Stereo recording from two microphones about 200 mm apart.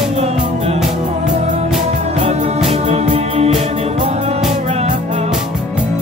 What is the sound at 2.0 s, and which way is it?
Music, 35° right (ahead or behind).